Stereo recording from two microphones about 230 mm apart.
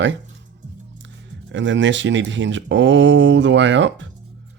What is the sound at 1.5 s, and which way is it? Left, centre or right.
Speech, right.